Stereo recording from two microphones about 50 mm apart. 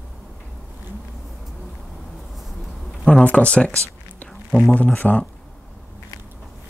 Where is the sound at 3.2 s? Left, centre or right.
Left.